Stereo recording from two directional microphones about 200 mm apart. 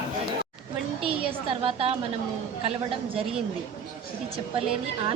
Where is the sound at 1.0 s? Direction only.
30° right (ahead or behind).